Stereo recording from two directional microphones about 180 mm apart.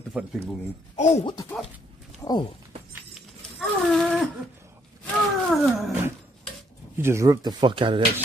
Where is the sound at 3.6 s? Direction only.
Centre (ahead or behind).